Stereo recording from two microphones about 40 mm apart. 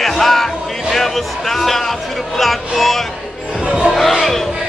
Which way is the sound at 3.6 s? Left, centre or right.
Right.